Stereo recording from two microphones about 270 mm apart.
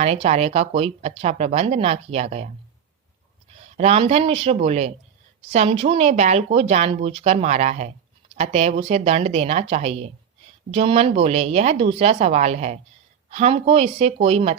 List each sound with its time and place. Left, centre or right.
0.0 s speech: right
3.8 s speech: right